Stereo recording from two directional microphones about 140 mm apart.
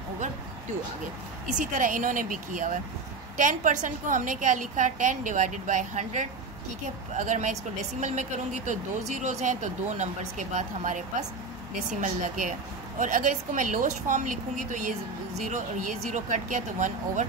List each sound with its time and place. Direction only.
1.5 s speech: 70° right (ahead or behind)